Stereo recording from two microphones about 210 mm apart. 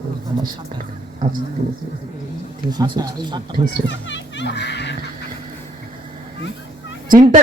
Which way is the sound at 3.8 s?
60° left (ahead or behind).